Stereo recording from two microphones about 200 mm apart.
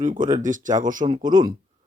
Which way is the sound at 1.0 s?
25° right (ahead or behind).